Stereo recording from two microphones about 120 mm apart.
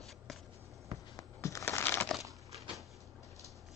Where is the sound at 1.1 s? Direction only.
25° left (ahead or behind).